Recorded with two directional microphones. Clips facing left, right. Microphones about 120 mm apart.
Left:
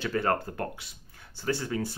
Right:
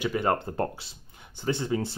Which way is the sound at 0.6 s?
30° right (ahead or behind).